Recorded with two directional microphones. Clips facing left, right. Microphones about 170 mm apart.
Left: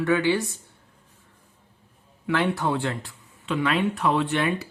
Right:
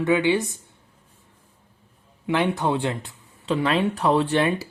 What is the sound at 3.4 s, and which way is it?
Speech, 35° right (ahead or behind).